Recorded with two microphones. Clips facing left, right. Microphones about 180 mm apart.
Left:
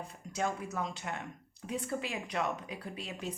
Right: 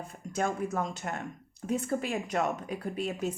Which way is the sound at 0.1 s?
50° right (ahead or behind).